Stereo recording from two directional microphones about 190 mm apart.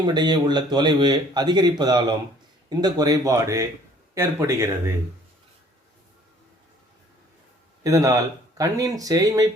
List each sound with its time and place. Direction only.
0.0 s speech: 20° right (ahead or behind)
7.9 s speech: 20° right (ahead or behind)